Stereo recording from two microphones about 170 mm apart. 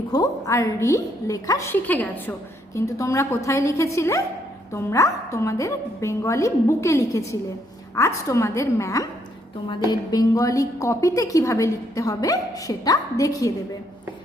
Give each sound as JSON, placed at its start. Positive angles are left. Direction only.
{"t": 0.1, "sound": "a woman's voice", "side_deg": 20}